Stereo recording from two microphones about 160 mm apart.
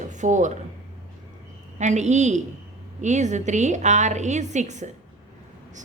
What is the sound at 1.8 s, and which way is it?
A woman's voice, 45° right (ahead or behind).